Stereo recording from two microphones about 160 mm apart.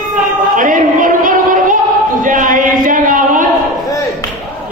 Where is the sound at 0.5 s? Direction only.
55° right (ahead or behind).